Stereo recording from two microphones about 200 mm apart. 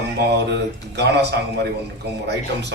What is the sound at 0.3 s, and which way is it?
A man's voice, 60° right (ahead or behind).